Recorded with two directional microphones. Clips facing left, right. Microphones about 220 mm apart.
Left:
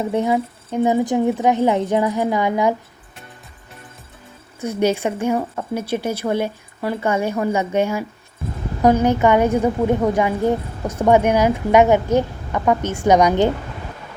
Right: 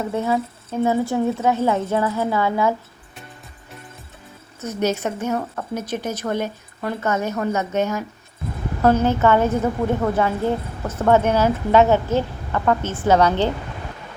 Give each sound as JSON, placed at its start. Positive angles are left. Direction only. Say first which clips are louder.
{"t": 0.0, "sound": "a woman's voice", "louder": "left 3 dB", "side_deg": 15}
{"t": 4.6, "sound": "a woman's voice", "louder": "left 3 dB", "side_deg": 10}